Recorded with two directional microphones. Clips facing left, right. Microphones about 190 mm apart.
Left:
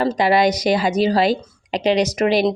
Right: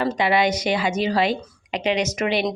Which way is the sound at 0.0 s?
40° left (ahead or behind).